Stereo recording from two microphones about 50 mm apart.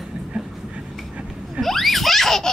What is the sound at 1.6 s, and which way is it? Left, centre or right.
Speech, centre.